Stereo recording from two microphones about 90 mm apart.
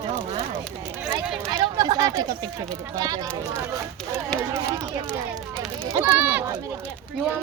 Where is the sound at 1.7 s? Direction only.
50° right (ahead or behind).